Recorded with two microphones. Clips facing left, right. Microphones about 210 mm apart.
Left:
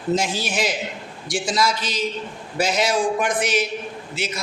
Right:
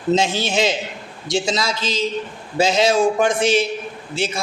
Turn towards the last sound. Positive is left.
turn(degrees=-30)  # may be behind; listen again after turning